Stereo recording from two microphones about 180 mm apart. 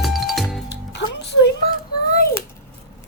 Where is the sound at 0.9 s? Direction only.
70° left (ahead or behind).